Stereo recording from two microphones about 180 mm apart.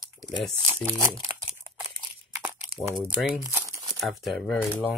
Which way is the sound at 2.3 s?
15° right (ahead or behind).